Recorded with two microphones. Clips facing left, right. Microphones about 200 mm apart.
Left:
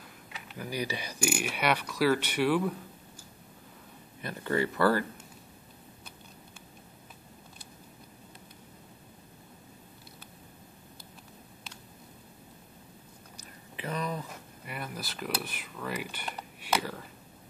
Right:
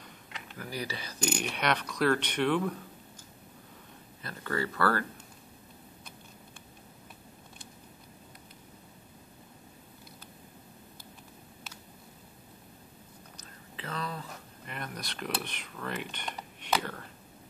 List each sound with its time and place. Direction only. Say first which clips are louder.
0.6 s speech: left 3 dB; 15° left (ahead or behind)
4.2 s speech: left 4 dB; 20° left (ahead or behind)
13.4 s a sound: left 4 dB; 15° left (ahead or behind)
14.7 s speech: left 1 dB; 5° left (ahead or behind)